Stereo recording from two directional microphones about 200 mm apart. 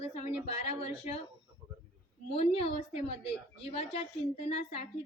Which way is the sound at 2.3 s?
30° left (ahead or behind).